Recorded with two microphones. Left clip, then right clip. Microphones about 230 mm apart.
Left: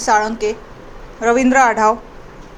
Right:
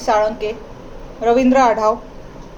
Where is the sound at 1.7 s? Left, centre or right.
Left.